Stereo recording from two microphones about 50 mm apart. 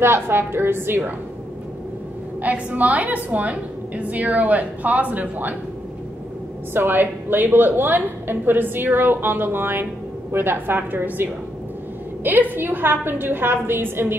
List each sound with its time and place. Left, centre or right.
0.0 s a woman's voice: right
2.4 s a woman's voice: right
6.7 s a woman's voice: right